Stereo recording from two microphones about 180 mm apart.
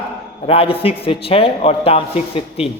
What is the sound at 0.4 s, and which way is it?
Speech, 30° left (ahead or behind).